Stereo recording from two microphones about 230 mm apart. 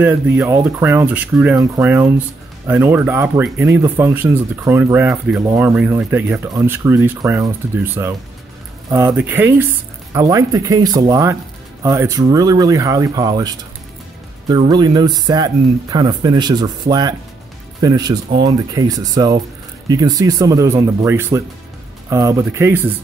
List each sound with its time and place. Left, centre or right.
0.0 s speech: centre
17.7 s speech: centre